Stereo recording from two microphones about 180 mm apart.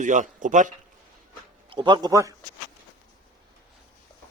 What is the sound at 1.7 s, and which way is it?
Speech, 25° right (ahead or behind).